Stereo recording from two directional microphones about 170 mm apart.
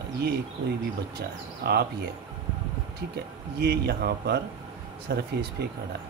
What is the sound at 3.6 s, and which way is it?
Speech, 65° right (ahead or behind).